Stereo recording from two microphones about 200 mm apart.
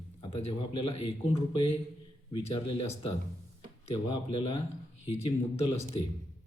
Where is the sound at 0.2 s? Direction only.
30° left (ahead or behind).